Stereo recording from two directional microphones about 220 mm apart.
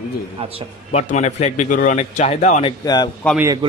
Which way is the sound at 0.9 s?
30° left (ahead or behind).